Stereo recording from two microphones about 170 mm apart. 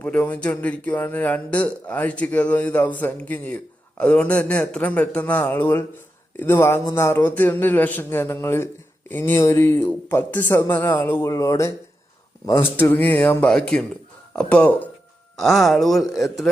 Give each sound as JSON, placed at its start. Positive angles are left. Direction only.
{"t": 0.0, "sound": "speech", "side_deg": 10}